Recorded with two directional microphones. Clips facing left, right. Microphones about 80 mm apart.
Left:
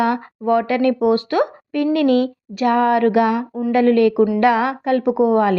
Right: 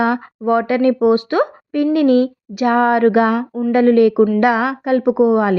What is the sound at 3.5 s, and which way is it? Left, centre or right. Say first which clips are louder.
Speech: right 3 dB; centre.